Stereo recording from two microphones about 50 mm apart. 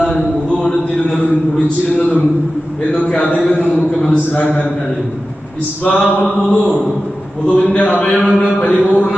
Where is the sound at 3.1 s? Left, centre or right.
Left.